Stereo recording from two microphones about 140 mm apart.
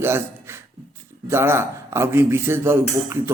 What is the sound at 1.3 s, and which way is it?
A man's voice, 20° right (ahead or behind).